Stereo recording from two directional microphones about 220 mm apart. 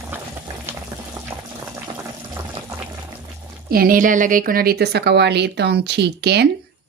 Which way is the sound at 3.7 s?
40° right (ahead or behind).